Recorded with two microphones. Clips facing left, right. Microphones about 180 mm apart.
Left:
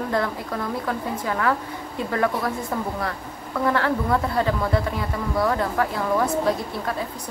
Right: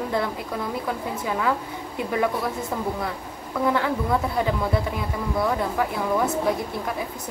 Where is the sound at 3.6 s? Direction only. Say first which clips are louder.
Left 1 dB; 10° right (ahead or behind).